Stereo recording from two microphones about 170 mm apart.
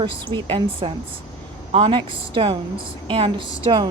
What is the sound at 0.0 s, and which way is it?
A woman's voice, 30° right (ahead or behind).